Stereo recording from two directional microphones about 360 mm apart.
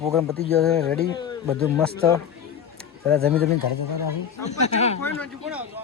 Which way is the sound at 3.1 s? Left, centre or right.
Right.